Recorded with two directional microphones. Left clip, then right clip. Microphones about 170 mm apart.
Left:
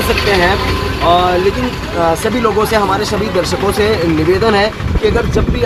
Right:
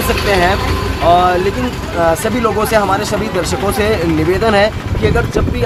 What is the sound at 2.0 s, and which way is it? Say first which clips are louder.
Speech: left 1 dB; 10° right (ahead or behind).